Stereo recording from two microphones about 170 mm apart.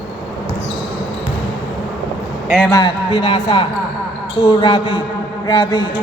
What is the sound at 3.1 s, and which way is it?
A man's voice, 35° left (ahead or behind).